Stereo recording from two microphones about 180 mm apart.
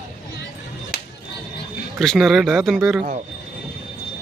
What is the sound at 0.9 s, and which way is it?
Music, 60° left (ahead or behind).